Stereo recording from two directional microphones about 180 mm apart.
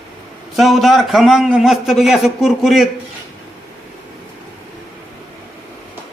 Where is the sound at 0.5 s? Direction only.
Centre (ahead or behind).